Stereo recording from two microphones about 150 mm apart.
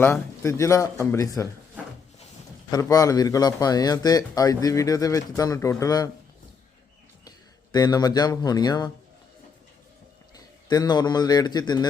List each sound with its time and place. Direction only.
0.0 s speech: 15° left (ahead or behind)
2.6 s speech: 25° left (ahead or behind)
7.3 s speech: 25° left (ahead or behind)
10.3 s a man's voice: 25° left (ahead or behind)